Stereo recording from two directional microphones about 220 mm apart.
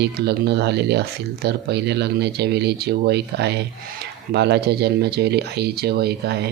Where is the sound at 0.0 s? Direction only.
50° right (ahead or behind).